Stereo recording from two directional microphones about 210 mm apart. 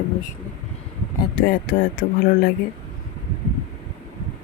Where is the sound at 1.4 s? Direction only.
40° left (ahead or behind).